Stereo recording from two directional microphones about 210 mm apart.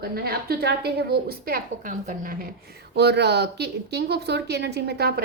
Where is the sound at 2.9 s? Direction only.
50° right (ahead or behind).